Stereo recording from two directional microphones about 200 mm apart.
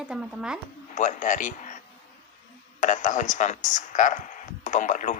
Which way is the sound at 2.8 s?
40° left (ahead or behind).